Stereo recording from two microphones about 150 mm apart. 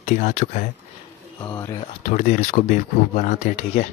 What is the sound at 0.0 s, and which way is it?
Speech, 55° left (ahead or behind).